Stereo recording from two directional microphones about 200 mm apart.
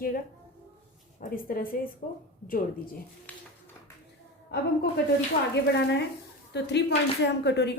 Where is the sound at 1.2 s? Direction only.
45° left (ahead or behind).